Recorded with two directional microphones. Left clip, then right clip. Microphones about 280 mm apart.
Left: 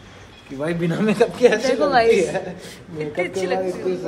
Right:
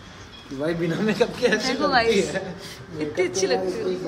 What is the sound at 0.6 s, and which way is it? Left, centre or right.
Speech, left.